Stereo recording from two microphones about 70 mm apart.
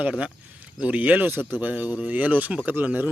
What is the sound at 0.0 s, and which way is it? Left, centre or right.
A man's voice, centre.